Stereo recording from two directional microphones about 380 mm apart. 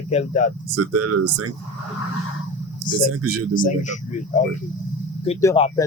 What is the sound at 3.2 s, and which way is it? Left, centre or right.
Speech, right.